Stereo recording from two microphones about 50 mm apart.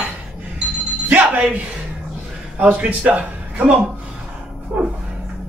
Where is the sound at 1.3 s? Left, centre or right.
Right.